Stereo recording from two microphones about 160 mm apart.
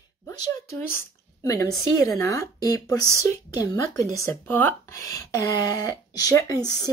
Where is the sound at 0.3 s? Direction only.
15° left (ahead or behind).